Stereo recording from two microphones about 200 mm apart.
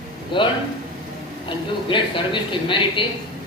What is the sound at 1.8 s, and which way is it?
Speech, 25° left (ahead or behind).